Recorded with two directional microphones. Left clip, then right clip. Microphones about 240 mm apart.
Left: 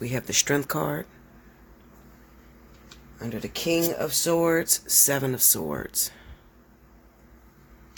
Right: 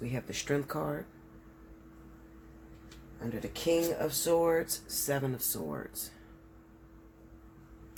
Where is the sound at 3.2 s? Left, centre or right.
Left.